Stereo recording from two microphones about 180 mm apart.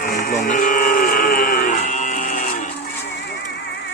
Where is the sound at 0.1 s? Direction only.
45° left (ahead or behind).